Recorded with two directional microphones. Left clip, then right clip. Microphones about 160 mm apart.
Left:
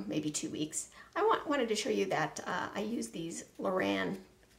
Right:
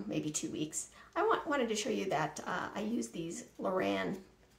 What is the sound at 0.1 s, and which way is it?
Speech, 25° left (ahead or behind).